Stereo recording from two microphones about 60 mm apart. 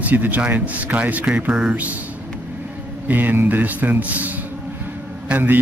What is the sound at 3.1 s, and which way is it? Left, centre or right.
Speech, right.